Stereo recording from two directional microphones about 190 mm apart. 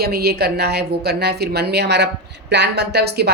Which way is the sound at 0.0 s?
55° right (ahead or behind).